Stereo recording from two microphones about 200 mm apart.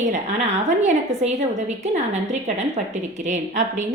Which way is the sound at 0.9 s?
35° right (ahead or behind).